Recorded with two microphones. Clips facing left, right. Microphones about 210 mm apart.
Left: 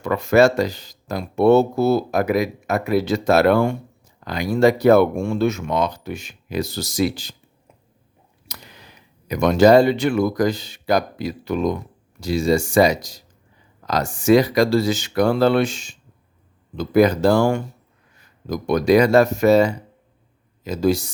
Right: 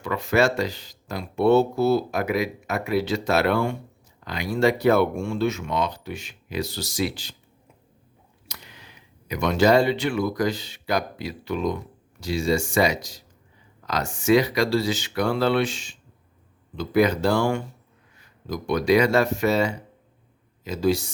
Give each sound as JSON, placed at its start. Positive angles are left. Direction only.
{"t": 0.0, "sound": "speech", "side_deg": 45}
{"t": 8.4, "sound": "speech", "side_deg": 40}